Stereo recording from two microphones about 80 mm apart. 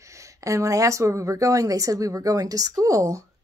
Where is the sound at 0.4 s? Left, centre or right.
Right.